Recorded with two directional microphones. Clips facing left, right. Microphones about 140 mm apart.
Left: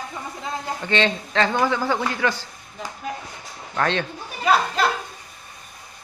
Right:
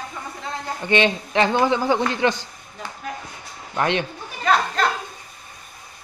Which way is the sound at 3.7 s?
15° right (ahead or behind).